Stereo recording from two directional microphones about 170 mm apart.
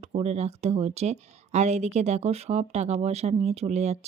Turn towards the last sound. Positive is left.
turn(degrees=-40)  # may be behind; listen again after turning